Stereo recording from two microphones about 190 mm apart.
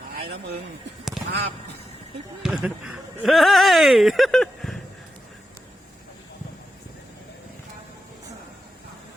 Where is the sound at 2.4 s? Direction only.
Centre (ahead or behind).